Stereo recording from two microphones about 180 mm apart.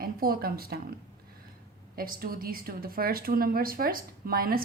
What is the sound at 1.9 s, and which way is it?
A woman's voice, 55° right (ahead or behind).